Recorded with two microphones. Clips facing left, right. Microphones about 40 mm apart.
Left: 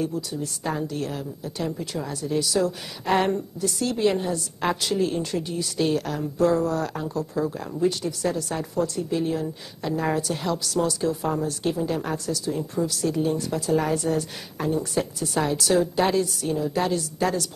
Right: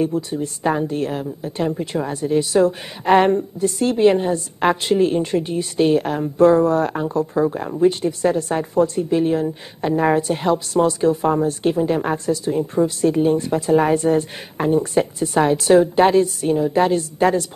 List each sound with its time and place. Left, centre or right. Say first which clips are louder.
0.0 s a woman's voice: right 7 dB; right